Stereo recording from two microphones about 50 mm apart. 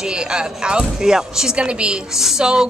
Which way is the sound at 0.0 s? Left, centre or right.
Centre.